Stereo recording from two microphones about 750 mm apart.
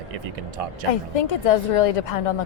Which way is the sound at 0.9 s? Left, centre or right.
Left.